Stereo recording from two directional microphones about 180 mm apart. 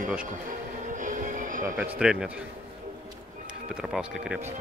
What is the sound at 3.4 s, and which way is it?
Speech, 5° right (ahead or behind).